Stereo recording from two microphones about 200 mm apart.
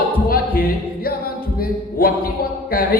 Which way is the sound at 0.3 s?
45° left (ahead or behind).